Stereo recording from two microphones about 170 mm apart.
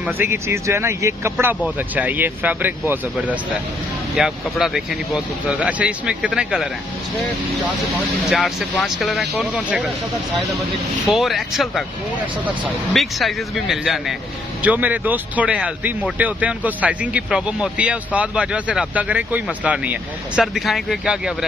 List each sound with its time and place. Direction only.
0.0 s speech: 15° right (ahead or behind)
8.3 s speech: centre (ahead or behind)
11.1 s speech: centre (ahead or behind)